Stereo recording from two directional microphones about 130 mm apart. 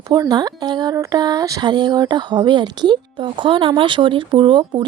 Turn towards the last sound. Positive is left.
turn(degrees=-35)  # may be behind; listen again after turning